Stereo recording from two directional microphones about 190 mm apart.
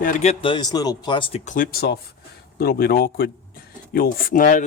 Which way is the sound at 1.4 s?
45° left (ahead or behind).